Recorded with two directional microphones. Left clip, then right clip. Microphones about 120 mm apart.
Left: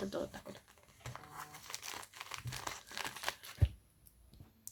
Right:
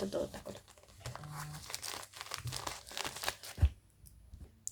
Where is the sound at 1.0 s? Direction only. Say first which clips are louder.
Right 2 dB; 5° right (ahead or behind).